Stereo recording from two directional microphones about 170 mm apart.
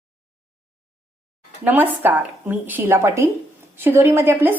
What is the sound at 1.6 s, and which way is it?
A woman's voice, 10° right (ahead or behind).